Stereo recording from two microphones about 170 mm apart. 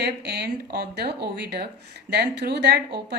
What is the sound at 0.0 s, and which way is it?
A woman's voice, 70° right (ahead or behind).